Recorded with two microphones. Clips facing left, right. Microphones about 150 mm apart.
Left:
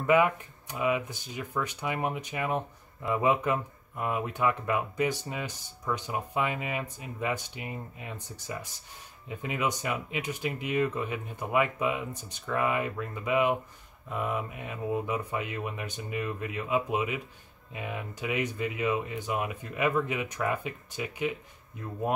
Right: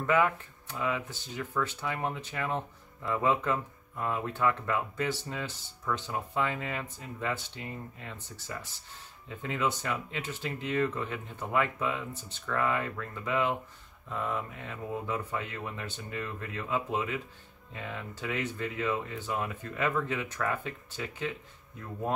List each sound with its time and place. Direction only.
0.0 s speech: 15° left (ahead or behind)